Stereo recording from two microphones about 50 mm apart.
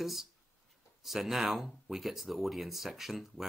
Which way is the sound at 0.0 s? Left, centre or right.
Centre.